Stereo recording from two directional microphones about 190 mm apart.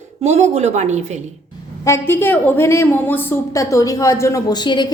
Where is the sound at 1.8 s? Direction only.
15° left (ahead or behind).